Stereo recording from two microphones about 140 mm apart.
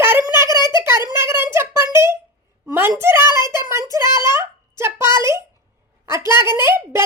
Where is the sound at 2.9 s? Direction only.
20° right (ahead or behind).